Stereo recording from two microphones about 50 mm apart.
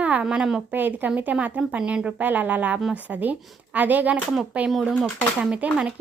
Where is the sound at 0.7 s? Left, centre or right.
Right.